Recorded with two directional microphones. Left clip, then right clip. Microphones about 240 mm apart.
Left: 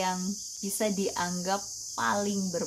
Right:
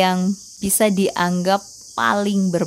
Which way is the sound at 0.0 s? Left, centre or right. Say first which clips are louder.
Right 12 dB; right.